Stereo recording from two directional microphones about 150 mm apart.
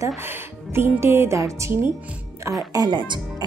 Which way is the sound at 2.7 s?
25° right (ahead or behind).